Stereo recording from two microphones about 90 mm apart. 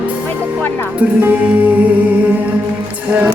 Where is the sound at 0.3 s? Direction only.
20° left (ahead or behind).